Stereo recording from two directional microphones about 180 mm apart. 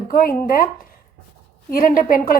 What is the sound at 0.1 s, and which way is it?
Speech, 50° left (ahead or behind).